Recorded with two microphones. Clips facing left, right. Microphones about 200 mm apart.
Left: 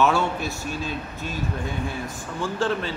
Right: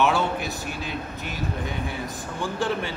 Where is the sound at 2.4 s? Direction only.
15° right (ahead or behind).